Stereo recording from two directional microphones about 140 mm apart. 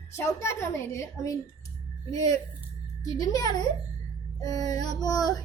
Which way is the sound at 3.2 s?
25° left (ahead or behind).